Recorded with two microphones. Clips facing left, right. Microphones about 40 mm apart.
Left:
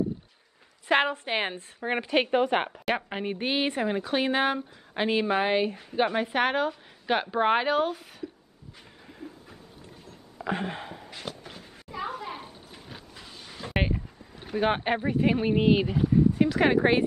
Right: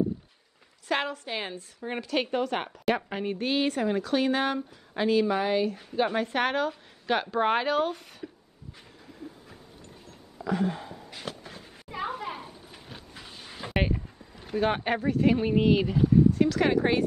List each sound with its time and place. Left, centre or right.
0.8 s a woman's voice: left
6.0 s speech: centre
10.4 s a sound: left
12.7 s train: centre
13.1 s a sound: centre
14.5 s a woman's voice: centre